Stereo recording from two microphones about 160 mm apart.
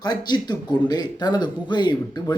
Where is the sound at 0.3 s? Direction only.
25° left (ahead or behind).